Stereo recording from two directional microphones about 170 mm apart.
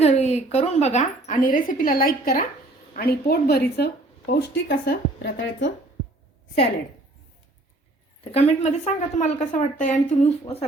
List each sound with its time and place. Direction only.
0.0 s a woman's voice: 40° left (ahead or behind); by 5.6 s 90° left
8.2 s a woman's voice: 35° left (ahead or behind)